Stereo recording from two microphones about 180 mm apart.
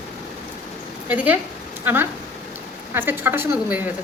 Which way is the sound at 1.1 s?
10° right (ahead or behind).